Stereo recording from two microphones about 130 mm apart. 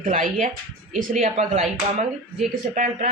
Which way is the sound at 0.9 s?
60° right (ahead or behind).